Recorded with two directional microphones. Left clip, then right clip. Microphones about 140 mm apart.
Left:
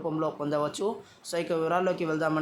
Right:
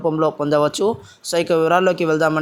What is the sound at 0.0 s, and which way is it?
Speech, 55° right (ahead or behind).